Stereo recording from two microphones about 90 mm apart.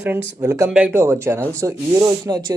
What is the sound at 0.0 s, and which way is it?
A man's voice, 30° right (ahead or behind).